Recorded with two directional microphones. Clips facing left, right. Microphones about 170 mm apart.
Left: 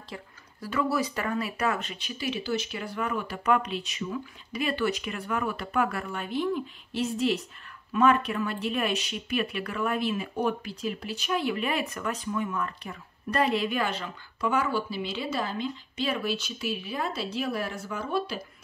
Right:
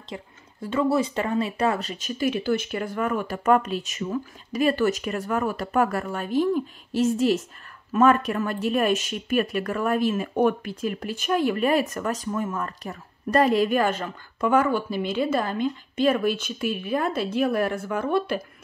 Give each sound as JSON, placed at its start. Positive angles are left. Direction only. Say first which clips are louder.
{"t": 0.1, "sound": "speech", "louder": "right 6 dB", "side_deg": -25}